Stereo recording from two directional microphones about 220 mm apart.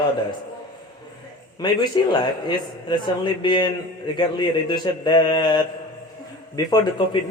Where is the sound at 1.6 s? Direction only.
20° left (ahead or behind).